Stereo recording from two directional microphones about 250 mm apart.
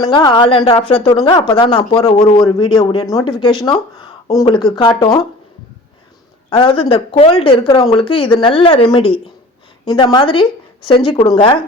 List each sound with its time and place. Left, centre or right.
0.0 s speech: centre
3.5 s speech: centre
4.4 s speech: centre
6.5 s speech: left